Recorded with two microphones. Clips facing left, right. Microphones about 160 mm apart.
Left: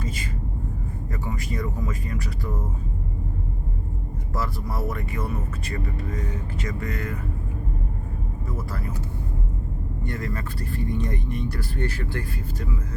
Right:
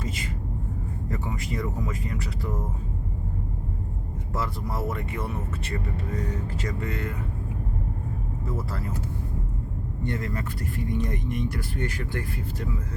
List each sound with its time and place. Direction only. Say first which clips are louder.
1.1 s speech: even; 25° right (ahead or behind)
4.4 s speech: left 1 dB; 25° right (ahead or behind)
8.4 s speech: right 1 dB; 25° right (ahead or behind)
10.0 s speech: right 1 dB; 20° right (ahead or behind)